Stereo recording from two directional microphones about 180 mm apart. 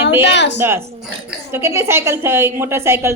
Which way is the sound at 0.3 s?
75° left (ahead or behind).